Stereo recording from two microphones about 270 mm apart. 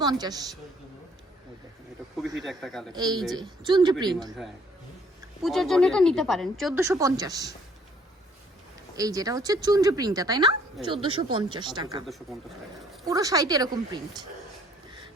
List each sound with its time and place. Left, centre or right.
0.0 s a woman's voice: centre
2.2 s a woman's voice: centre
2.9 s a woman's voice: centre
5.4 s a woman's voice: centre
6.7 s a woman's voice: centre
9.0 s a woman's voice: centre
13.1 s a woman's voice: centre